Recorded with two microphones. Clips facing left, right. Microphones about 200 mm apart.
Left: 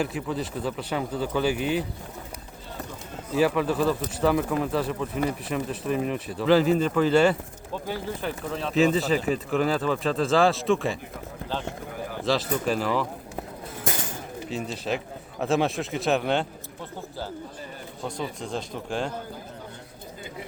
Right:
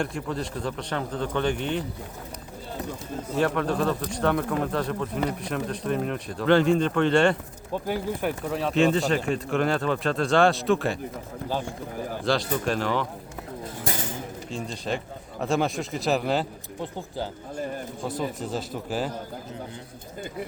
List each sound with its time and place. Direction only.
0.0 s speech: 5° left (ahead or behind)
3.3 s speech: 5° left (ahead or behind)
7.7 s speech: 15° right (ahead or behind)
8.7 s speech: centre (ahead or behind)
12.2 s speech: centre (ahead or behind)
14.5 s speech: 5° left (ahead or behind)
18.0 s speech: 5° right (ahead or behind)